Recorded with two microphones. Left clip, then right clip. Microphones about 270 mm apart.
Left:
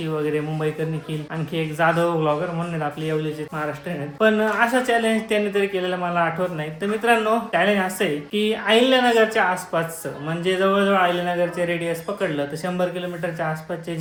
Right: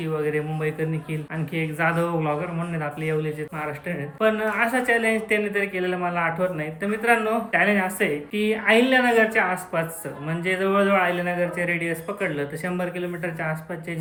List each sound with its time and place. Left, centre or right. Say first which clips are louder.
1.5 s speech: left 4 dB; centre
4.2 s speech: left 3 dB; left